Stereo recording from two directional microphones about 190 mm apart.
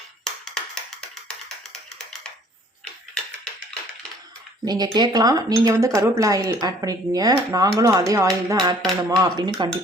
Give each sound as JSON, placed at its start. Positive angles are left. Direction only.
{"t": 0.3, "sound": "tap", "side_deg": 5}
{"t": 4.6, "sound": "speech", "side_deg": -20}